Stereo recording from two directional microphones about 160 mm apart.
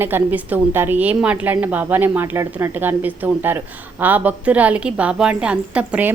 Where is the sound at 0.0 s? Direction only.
10° right (ahead or behind).